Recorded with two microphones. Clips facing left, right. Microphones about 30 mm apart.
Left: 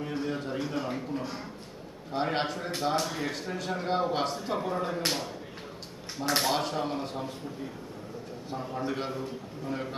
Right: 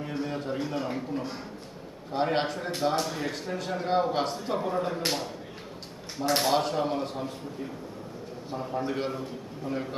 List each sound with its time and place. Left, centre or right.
0.0 s a man's voice: centre
8.4 s a man's voice: centre